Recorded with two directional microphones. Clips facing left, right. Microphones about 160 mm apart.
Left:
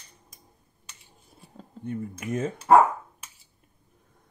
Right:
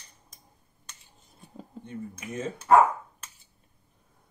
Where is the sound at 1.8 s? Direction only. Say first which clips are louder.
Left 7 dB; 55° left (ahead or behind).